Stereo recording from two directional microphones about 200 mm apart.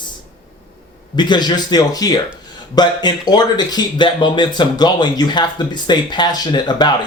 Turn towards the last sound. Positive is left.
turn(degrees=20)  # may be behind; listen again after turning